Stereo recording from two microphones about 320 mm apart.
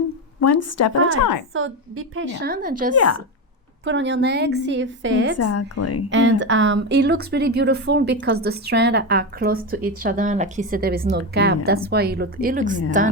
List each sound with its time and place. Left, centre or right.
0.3 s a woman's voice: left
1.5 s speech: right
2.9 s a woman's voice: left
3.8 s a woman's voice: right
5.4 s a woman's voice: left
6.1 s speech: right